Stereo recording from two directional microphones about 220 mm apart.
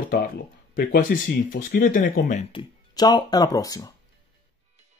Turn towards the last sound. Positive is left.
turn(degrees=15)  # may be behind; listen again after turning